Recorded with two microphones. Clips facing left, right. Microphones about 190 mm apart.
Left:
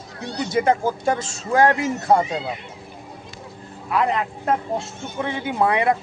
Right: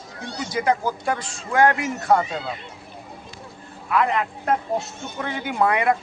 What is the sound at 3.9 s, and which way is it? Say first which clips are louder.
Speech: even; 35° left (ahead or behind).